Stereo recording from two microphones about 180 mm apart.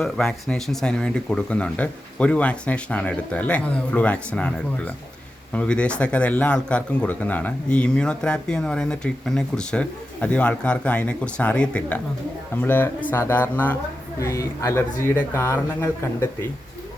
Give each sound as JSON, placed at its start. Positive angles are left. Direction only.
{"t": 0.0, "sound": "speech", "side_deg": 5}